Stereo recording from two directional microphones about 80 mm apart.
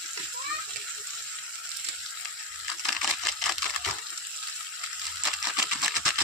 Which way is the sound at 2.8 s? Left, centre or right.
Centre.